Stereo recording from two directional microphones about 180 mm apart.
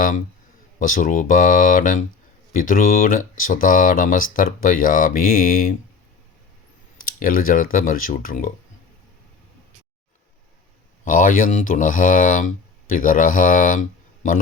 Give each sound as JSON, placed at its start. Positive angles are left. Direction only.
{"t": 0.8, "sound": "speech", "side_deg": 50}
{"t": 7.0, "sound": "speech", "side_deg": 50}
{"t": 11.0, "sound": "speech", "side_deg": 50}